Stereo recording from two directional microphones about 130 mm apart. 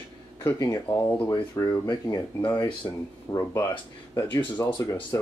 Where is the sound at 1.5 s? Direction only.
30° left (ahead or behind).